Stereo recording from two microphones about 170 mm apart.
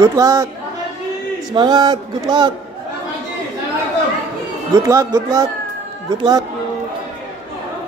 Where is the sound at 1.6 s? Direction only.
25° right (ahead or behind).